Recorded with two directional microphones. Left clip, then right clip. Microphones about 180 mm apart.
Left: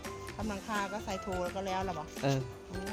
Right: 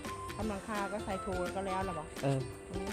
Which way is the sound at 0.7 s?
70° left (ahead or behind).